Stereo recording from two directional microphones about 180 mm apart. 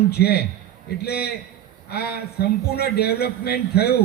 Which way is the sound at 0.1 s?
60° left (ahead or behind).